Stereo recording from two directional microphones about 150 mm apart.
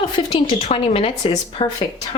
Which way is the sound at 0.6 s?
40° left (ahead or behind).